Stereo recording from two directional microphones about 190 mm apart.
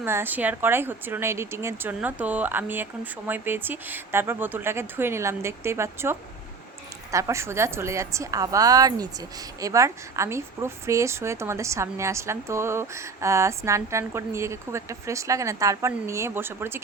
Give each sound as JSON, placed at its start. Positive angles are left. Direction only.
{"t": 0.0, "sound": "speech", "side_deg": -10}